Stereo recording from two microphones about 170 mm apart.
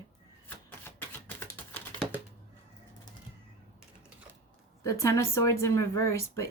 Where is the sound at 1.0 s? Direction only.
10° left (ahead or behind).